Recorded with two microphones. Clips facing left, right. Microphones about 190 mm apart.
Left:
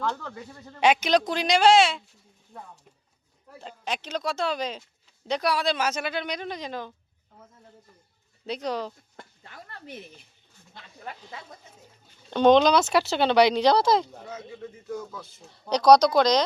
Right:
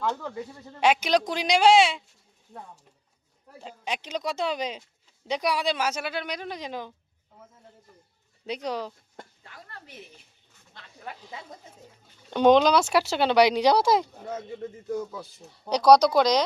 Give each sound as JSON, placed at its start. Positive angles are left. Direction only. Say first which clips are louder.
{"t": 0.0, "sound": "speech", "louder": "right 1 dB", "side_deg": -15}
{"t": 3.6, "sound": "speech", "louder": "left 1 dB", "side_deg": -10}
{"t": 8.4, "sound": "speech", "louder": "left 1 dB", "side_deg": -10}
{"t": 11.0, "sound": "speech", "louder": "even", "side_deg": -5}
{"t": 14.3, "sound": "speech", "louder": "right 4 dB", "side_deg": -50}
{"t": 14.9, "sound": "speech", "louder": "right 4 dB", "side_deg": -15}